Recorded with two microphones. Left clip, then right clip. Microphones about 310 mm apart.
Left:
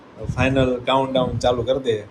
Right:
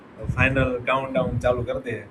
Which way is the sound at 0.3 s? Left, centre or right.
Centre.